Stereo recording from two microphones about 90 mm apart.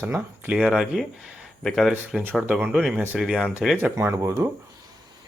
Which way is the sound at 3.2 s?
5° right (ahead or behind).